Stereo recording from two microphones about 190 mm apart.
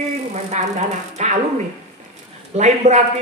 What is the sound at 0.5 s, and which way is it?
Speech, 35° right (ahead or behind).